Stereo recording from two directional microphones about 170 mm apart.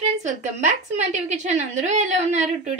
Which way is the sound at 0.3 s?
45° right (ahead or behind).